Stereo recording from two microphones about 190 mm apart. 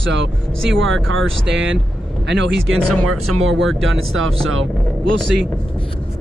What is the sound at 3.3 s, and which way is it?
Speech, 90° right.